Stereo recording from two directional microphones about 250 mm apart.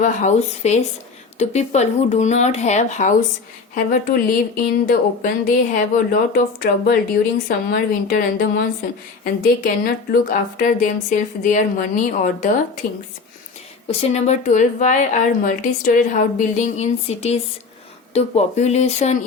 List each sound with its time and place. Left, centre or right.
0.0 s a woman's voice: left
13.8 s a woman's voice: left